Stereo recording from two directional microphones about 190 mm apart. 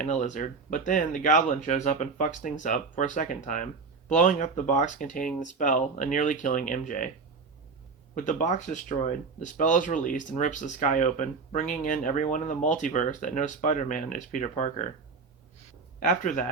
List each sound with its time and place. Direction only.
0.0 s speech: 40° left (ahead or behind)
8.1 s speech: 40° left (ahead or behind)
16.0 s speech: 45° left (ahead or behind)